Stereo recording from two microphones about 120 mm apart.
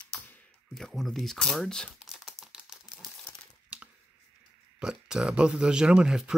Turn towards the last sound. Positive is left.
turn(degrees=-5)  # may be behind; listen again after turning